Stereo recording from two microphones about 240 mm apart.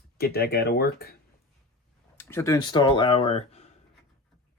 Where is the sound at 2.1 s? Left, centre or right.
Centre; by 3.6 s left.